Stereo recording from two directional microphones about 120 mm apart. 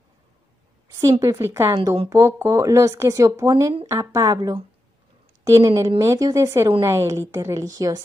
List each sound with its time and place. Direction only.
1.2 s a woman's voice: 25° right (ahead or behind)